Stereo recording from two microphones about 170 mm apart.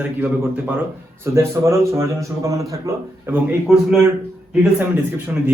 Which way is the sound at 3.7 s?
Centre (ahead or behind).